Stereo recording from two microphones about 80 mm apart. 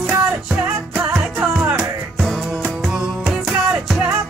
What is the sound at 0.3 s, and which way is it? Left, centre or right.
Music, centre.